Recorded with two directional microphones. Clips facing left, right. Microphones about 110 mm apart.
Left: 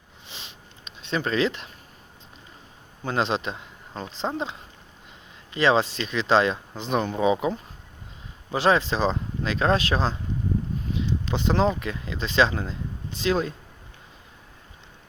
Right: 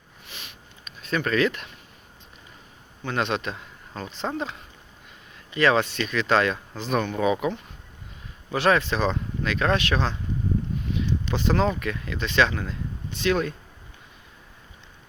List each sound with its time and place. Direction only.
0.3 s a sound: 25° left (ahead or behind)
3.0 s speech: 30° left (ahead or behind)
8.5 s speech: 25° left (ahead or behind)